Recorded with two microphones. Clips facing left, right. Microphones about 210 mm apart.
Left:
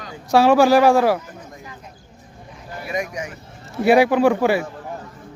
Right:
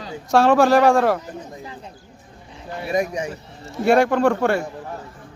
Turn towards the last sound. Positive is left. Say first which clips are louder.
# left 2 dB
turn(degrees=5)  # may be behind; listen again after turning